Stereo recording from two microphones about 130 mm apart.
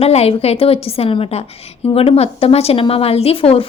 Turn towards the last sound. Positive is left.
turn(degrees=45)  # may be behind; listen again after turning